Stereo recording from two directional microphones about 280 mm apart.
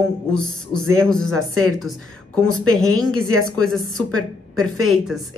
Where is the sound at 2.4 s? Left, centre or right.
Centre.